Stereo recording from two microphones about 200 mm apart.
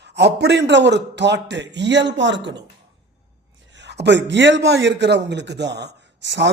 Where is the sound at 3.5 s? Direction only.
65° right (ahead or behind).